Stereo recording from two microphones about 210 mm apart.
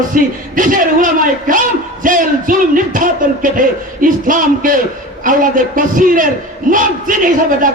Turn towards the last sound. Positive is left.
turn(degrees=-40)  # may be behind; listen again after turning